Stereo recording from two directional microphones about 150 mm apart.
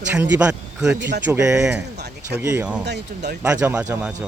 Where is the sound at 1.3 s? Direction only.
20° right (ahead or behind).